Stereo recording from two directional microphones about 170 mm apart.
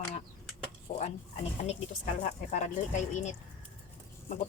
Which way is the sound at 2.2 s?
45° left (ahead or behind).